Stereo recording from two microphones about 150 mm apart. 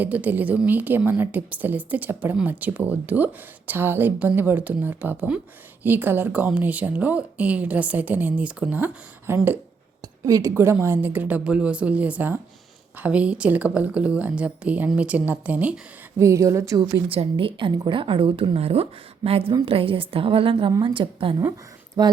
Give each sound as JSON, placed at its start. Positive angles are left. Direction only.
{"t": 0.0, "sound": "speech", "side_deg": -10}
{"t": 16.2, "sound": "speech", "side_deg": -20}
{"t": 17.1, "sound": "a woman's voice", "side_deg": -35}
{"t": 22.0, "sound": "speech", "side_deg": -25}